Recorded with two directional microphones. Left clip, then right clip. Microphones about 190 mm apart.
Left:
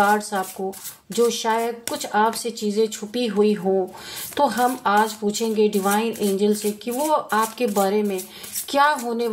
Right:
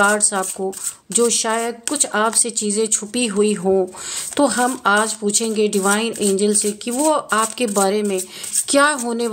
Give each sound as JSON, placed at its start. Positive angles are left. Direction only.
{"t": 0.0, "sound": "speech", "side_deg": -35}